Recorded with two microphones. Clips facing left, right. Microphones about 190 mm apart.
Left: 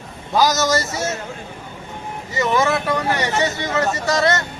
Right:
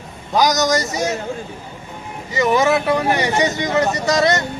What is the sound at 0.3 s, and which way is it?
Speech, 15° right (ahead or behind).